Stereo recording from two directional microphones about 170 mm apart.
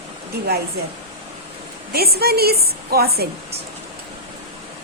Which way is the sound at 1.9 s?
65° right (ahead or behind).